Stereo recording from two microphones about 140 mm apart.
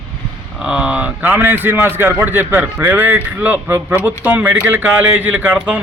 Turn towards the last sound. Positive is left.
turn(degrees=-10)  # may be behind; listen again after turning